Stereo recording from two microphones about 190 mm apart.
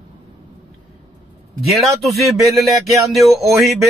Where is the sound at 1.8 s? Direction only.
Centre (ahead or behind).